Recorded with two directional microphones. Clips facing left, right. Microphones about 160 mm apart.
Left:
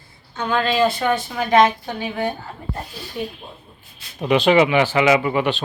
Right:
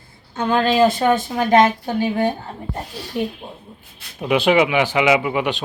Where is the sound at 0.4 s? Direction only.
40° right (ahead or behind).